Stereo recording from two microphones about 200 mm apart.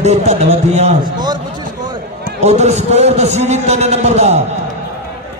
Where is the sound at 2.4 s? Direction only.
35° right (ahead or behind).